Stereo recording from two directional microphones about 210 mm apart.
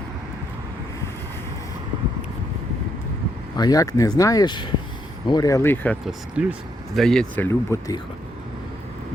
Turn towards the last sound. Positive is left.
turn(degrees=10)  # may be behind; listen again after turning